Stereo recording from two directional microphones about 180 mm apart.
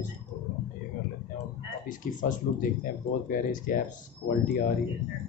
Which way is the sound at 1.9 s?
45° left (ahead or behind).